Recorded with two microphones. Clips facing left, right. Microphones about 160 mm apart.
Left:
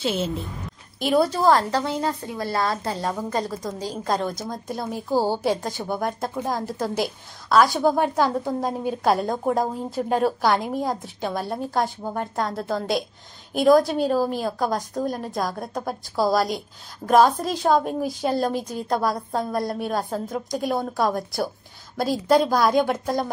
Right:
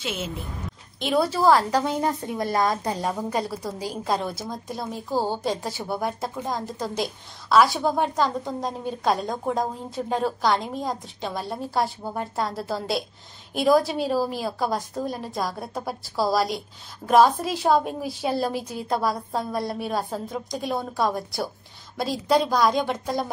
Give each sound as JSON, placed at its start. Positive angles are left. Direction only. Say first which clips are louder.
{"t": 0.0, "sound": "a woman's voice", "louder": "left 6 dB", "side_deg": 30}
{"t": 0.9, "sound": "a woman's voice", "louder": "left 2 dB", "side_deg": 0}
{"t": 5.6, "sound": "a woman's voice", "louder": "left 1 dB", "side_deg": -5}